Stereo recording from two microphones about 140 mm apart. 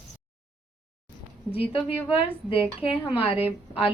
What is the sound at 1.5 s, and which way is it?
A woman's voice, 45° left (ahead or behind).